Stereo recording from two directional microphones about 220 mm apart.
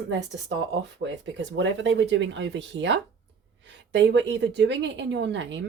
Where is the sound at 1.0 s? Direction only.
55° right (ahead or behind).